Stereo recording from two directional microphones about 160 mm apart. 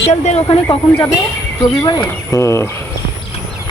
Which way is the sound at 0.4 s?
35° left (ahead or behind).